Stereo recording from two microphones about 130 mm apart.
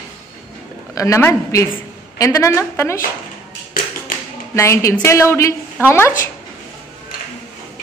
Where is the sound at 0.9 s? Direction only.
20° left (ahead or behind).